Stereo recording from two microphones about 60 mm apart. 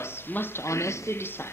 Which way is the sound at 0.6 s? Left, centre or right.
Left.